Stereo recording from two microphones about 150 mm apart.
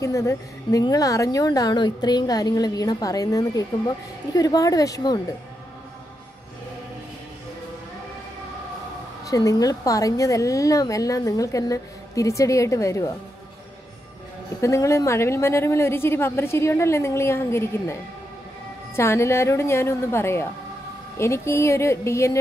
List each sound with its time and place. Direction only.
0.0 s a woman's voice: 20° left (ahead or behind)
9.2 s a woman's voice: 20° left (ahead or behind)
14.6 s a woman's voice: 20° left (ahead or behind)
18.9 s a woman's voice: 20° left (ahead or behind)